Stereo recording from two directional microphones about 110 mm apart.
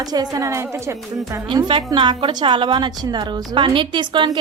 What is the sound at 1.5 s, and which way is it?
A woman's voice, 50° right (ahead or behind).